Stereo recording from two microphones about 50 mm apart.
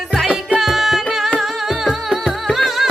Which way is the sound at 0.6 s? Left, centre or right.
Centre.